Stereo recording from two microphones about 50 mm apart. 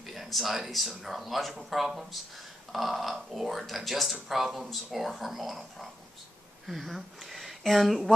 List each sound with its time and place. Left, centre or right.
0.0 s speech: centre